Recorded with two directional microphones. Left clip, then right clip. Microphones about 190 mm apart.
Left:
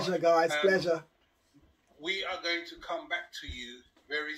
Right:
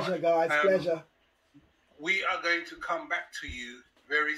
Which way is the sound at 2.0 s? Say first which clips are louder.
Right 5 dB; 45° right (ahead or behind).